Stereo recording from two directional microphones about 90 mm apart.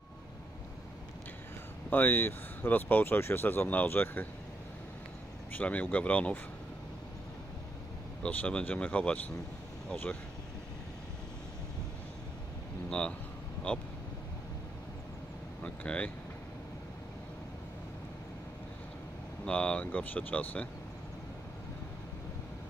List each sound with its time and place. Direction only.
1.9 s speech: 20° left (ahead or behind)
5.5 s speech: 15° left (ahead or behind)
8.2 s speech: 15° left (ahead or behind)
15.6 s vehicle: 15° left (ahead or behind)
19.4 s speech: 10° left (ahead or behind)